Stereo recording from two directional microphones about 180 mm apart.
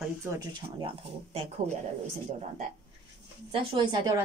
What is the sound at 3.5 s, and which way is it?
Speech, 25° right (ahead or behind).